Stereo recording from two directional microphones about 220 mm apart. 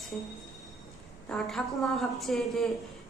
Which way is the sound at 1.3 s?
Centre (ahead or behind).